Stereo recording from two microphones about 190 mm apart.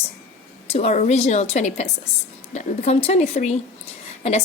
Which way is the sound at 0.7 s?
35° left (ahead or behind).